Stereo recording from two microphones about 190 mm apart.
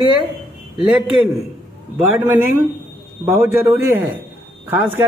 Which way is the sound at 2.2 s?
10° right (ahead or behind).